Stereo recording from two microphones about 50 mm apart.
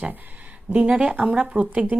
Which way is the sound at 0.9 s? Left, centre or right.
Centre.